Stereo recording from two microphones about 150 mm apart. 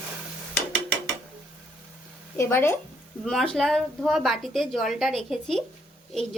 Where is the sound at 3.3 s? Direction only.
Centre (ahead or behind).